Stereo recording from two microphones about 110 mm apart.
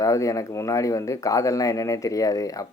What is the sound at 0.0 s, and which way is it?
Speech, 30° left (ahead or behind).